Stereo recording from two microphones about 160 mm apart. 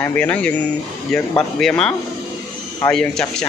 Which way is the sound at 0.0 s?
10° left (ahead or behind).